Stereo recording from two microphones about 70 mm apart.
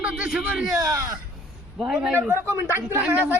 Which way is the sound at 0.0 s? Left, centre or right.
Centre.